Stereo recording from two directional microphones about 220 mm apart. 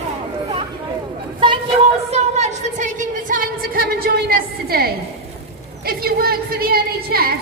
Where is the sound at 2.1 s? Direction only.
30° right (ahead or behind).